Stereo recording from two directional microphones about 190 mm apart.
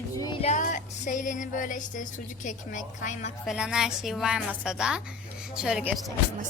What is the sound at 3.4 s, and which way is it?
Speech, centre (ahead or behind).